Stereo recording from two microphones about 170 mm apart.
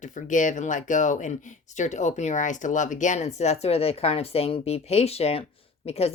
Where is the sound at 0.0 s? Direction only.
50° left (ahead or behind).